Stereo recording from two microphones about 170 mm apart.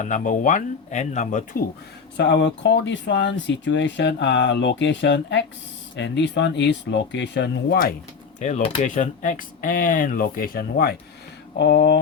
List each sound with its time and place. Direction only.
0.0 s speech: 50° left (ahead or behind)
2.1 s speech: 90° left; by 7.9 s 65° left (ahead or behind)
8.4 s speech: 45° left (ahead or behind)
8.6 s speech: 35° left (ahead or behind)
8.9 s speech: 50° left (ahead or behind)
11.5 s speech: 80° left